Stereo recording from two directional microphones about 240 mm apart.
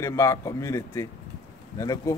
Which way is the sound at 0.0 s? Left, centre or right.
Centre.